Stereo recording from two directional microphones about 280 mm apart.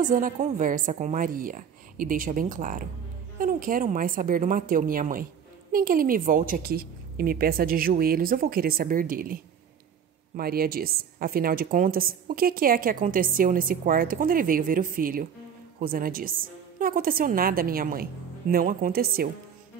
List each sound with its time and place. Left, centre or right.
0.0 s a woman's voice: right